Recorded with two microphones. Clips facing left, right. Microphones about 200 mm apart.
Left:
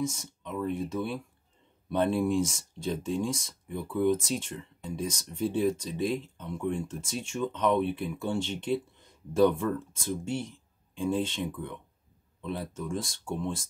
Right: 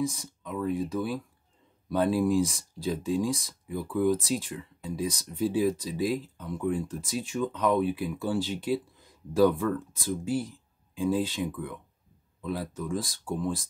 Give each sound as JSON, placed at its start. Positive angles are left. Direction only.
{"t": 0.0, "sound": "speech", "side_deg": 0}